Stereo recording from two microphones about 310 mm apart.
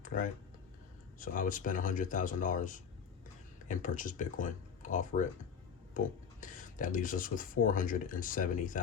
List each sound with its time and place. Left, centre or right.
0.0 s typing: left
1.2 s speech: left